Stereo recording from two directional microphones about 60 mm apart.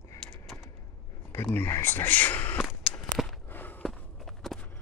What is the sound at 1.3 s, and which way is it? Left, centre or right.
Speech, left.